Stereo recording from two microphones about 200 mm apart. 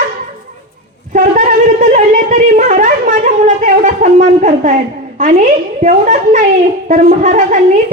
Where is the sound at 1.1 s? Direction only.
35° right (ahead or behind).